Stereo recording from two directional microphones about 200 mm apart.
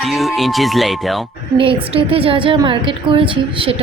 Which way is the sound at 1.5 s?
25° right (ahead or behind).